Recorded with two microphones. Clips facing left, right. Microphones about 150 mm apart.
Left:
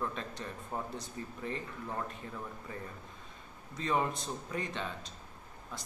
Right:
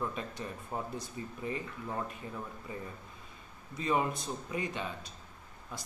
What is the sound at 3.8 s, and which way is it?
Speech, 10° right (ahead or behind).